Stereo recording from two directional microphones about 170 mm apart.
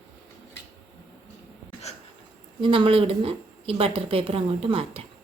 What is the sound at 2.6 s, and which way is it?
A woman's voice, 30° right (ahead or behind).